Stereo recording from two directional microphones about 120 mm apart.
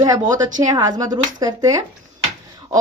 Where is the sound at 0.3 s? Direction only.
30° right (ahead or behind).